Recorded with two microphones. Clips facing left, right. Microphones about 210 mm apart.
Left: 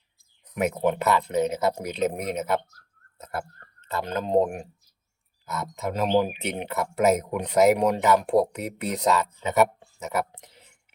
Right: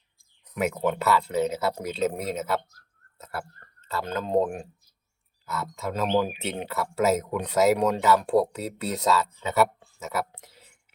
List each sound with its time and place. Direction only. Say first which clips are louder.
0.5 s speech: left 2 dB; 20° left (ahead or behind)